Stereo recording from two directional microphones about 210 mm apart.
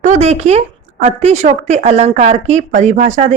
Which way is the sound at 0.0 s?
35° right (ahead or behind).